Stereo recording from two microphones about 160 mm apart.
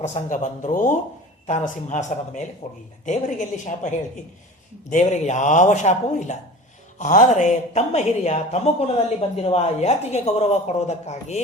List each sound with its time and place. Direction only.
0.0 s a woman's voice: 50° left (ahead or behind)
4.9 s a woman's voice: 50° left (ahead or behind)